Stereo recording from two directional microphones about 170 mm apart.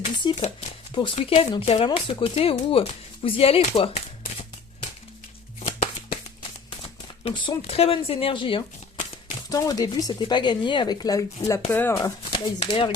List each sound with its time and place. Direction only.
0.2 s speech: 25° left (ahead or behind)
5.5 s shuffling cards: 40° left (ahead or behind)
7.3 s speech: 30° left (ahead or behind)
12.2 s speech: 30° left (ahead or behind)